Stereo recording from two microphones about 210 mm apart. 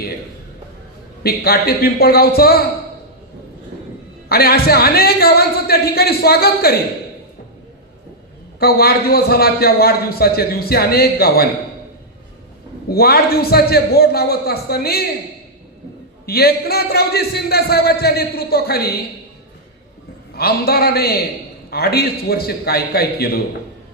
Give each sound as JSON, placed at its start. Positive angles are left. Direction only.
{"t": 1.2, "sound": "a man's voice", "side_deg": 45}
{"t": 4.3, "sound": "a man's voice", "side_deg": 45}
{"t": 8.5, "sound": "a man's voice", "side_deg": 50}
{"t": 12.9, "sound": "a man's voice", "side_deg": 45}
{"t": 16.2, "sound": "a man's voice", "side_deg": 45}
{"t": 20.3, "sound": "a man's voice", "side_deg": 45}